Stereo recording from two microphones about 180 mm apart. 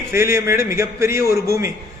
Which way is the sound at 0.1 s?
15° right (ahead or behind).